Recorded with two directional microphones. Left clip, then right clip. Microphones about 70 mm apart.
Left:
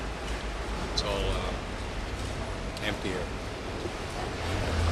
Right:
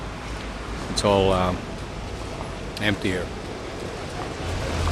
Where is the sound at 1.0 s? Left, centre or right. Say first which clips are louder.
Right 12 dB; right.